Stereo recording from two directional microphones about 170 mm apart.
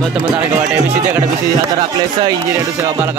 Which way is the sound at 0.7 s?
5° right (ahead or behind).